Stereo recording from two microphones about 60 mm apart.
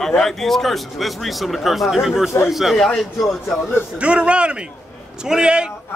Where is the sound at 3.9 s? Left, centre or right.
Centre.